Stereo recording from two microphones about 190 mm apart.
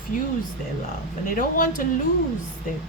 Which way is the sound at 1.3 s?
45° left (ahead or behind).